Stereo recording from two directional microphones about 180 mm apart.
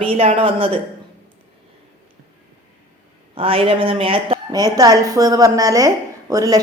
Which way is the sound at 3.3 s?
30° right (ahead or behind).